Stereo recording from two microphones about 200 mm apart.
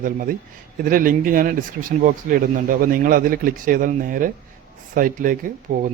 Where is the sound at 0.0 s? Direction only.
40° right (ahead or behind).